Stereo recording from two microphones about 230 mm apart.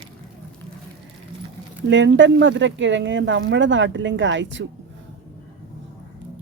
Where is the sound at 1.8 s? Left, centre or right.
Right.